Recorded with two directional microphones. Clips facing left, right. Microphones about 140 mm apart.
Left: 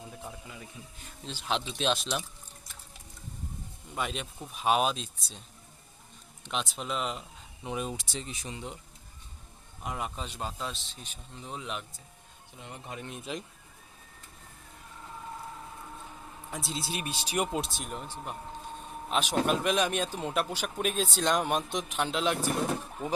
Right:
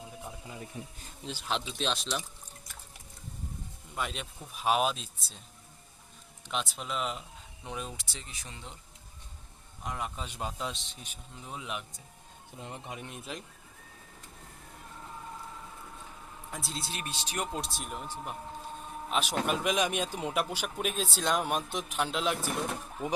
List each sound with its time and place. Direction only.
0.8 s speech: 75° right (ahead or behind)
1.5 s speech: centre (ahead or behind)
3.9 s speech: centre (ahead or behind)
6.4 s speech: centre (ahead or behind)
7.6 s speech: 10° left (ahead or behind)
9.8 s speech: 5° left (ahead or behind)
10.2 s a man's voice: 10° right (ahead or behind)
16.5 s speech: centre (ahead or behind)
16.9 s speech: 10° left (ahead or behind)